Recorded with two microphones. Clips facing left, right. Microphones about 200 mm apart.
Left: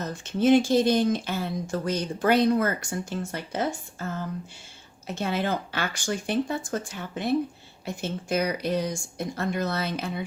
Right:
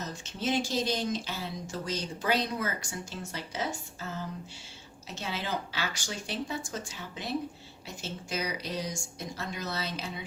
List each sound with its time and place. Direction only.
0.0 s speech: 55° left (ahead or behind)